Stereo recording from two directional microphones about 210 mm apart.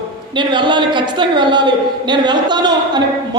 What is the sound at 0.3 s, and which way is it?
A woman's voice, 20° right (ahead or behind).